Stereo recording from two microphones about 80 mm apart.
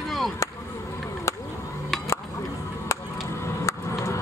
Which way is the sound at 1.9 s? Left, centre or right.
Centre.